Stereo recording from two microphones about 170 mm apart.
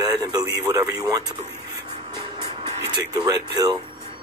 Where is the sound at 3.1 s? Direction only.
25° right (ahead or behind).